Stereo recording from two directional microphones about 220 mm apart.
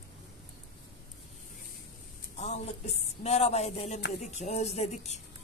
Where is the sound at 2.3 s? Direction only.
30° left (ahead or behind).